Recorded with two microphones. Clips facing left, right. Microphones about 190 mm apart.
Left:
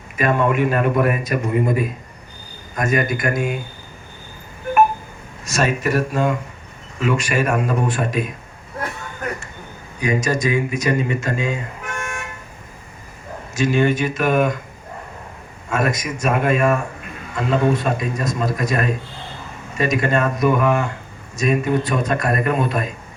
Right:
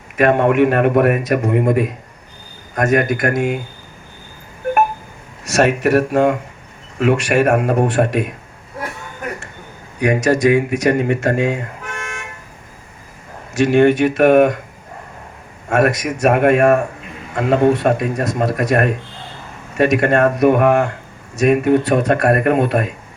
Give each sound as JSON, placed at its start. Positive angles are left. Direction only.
{"t": 0.2, "sound": "a man's voice", "side_deg": -70}
{"t": 5.5, "sound": "a man's voice", "side_deg": -70}
{"t": 10.0, "sound": "a man's voice", "side_deg": -70}
{"t": 13.5, "sound": "a man's voice", "side_deg": -65}
{"t": 15.7, "sound": "a man's voice", "side_deg": -70}